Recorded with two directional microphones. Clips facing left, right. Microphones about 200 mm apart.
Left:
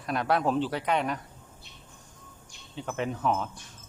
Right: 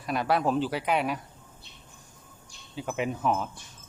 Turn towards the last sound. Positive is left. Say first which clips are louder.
# right 1 dB
turn(degrees=-10)  # may be behind; listen again after turning